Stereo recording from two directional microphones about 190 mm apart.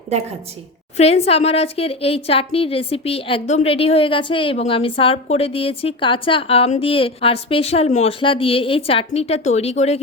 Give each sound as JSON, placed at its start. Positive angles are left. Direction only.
{"t": 0.9, "sound": "speech", "side_deg": 35}